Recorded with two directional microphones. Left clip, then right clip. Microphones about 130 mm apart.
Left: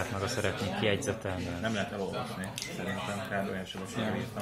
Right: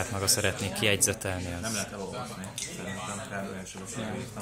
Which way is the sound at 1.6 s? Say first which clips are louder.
Left 4 dB; 25° left (ahead or behind).